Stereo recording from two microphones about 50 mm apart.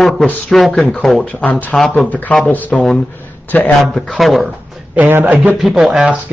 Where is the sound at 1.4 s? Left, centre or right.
Left.